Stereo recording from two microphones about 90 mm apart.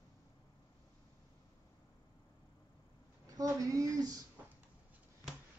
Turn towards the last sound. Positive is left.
turn(degrees=-40)  # may be behind; listen again after turning